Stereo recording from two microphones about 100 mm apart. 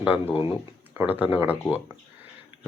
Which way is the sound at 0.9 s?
20° right (ahead or behind).